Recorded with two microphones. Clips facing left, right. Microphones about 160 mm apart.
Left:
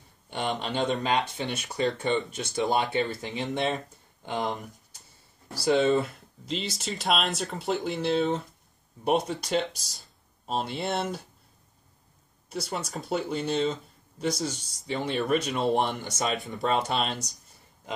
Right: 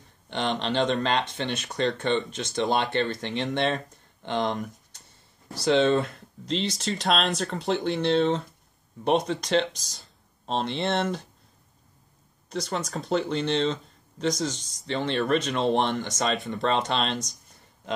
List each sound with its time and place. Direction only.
0.3 s speech: 10° left (ahead or behind)
12.4 s speech: 5° left (ahead or behind)